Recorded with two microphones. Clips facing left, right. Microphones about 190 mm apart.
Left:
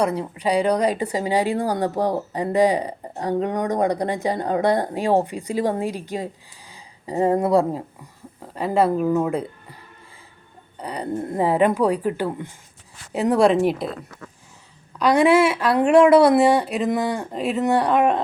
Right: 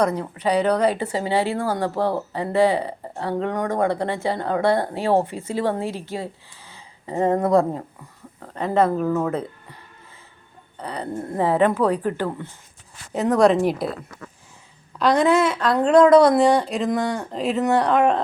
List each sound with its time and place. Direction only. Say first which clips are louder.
0.0 s a woman's voice: even; 10° left (ahead or behind)
10.8 s a woman's voice: left 2 dB; 10° left (ahead or behind)
14.9 s speech: left 2 dB; 5° left (ahead or behind)